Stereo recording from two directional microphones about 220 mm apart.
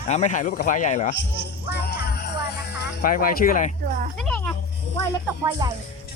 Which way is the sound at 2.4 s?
45° left (ahead or behind).